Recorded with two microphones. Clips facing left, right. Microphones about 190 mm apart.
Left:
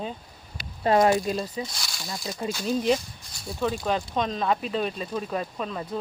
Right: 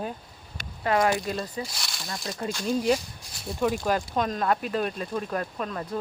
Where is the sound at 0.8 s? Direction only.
30° left (ahead or behind).